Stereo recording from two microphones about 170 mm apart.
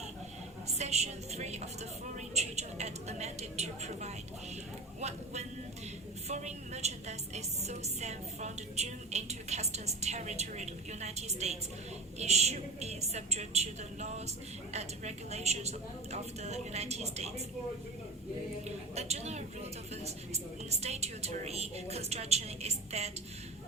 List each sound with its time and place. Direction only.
0.7 s a woman's voice: 40° right (ahead or behind)
2.3 s a sound: 40° right (ahead or behind)
4.9 s a woman's voice: 40° right (ahead or behind)
18.9 s a woman's voice: 40° right (ahead or behind)